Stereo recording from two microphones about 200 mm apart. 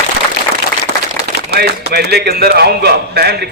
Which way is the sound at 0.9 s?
55° right (ahead or behind).